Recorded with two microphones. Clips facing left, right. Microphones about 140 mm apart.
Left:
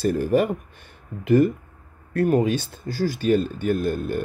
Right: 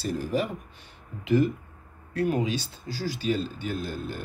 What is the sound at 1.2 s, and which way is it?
Speech, 50° left (ahead or behind).